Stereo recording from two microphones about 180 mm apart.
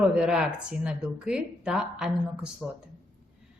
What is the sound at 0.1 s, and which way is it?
A woman's voice, 5° right (ahead or behind).